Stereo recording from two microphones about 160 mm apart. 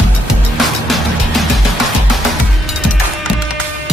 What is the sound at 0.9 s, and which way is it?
Music, centre (ahead or behind).